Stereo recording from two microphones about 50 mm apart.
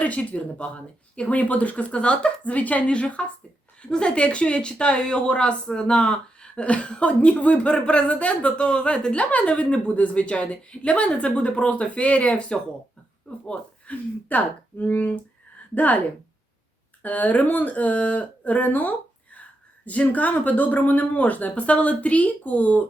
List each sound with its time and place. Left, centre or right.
0.0 s speech: left
13.5 s speech: left
17.0 s speech: left